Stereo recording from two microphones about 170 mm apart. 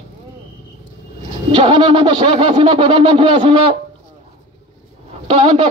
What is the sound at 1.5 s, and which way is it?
Speech, 30° right (ahead or behind).